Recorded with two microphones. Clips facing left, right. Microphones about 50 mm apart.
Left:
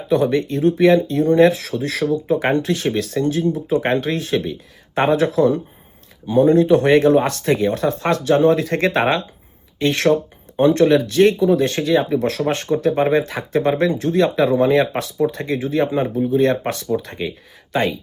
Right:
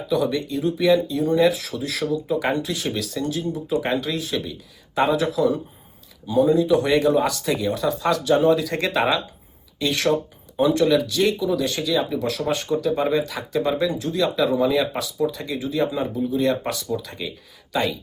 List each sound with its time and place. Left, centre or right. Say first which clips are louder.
0.1 s speech: left 5 dB; left
12.2 s speech: left 4 dB; left